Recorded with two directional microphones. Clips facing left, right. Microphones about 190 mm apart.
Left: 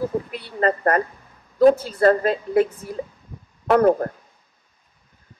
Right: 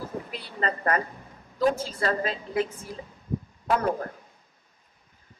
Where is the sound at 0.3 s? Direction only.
50° left (ahead or behind).